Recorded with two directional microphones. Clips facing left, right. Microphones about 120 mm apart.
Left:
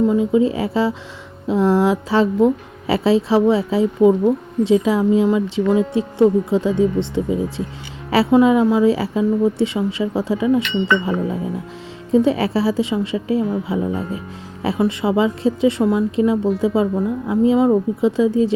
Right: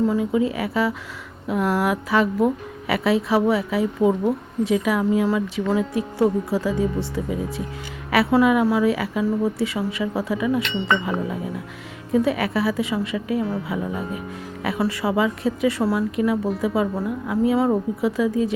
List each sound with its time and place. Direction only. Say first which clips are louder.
0.1 s a woman's voice: left 5 dB; 25° left (ahead or behind)
12.1 s a woman's voice: left 4 dB; 25° left (ahead or behind)